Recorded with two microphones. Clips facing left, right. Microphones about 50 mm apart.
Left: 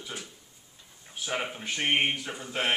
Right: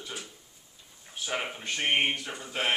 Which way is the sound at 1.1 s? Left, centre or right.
Centre.